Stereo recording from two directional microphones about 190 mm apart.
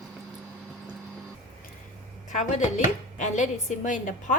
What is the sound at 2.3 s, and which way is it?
A woman's voice, 40° left (ahead or behind).